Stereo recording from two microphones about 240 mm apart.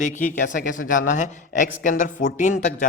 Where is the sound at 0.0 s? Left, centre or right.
Left.